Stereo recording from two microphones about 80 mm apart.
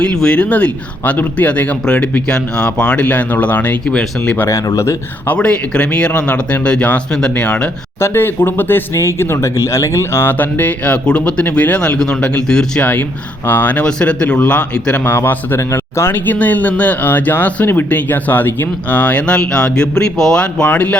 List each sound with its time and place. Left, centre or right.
0.0 s speech: centre
3.8 s speech: centre
4.4 s speech: left
5.2 s speech: centre
7.9 s a man's voice: left; by 12.9 s centre
12.9 s a man's voice: left
15.0 s a man's voice: left